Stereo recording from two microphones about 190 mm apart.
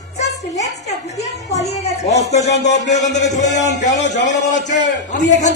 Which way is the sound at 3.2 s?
40° left (ahead or behind).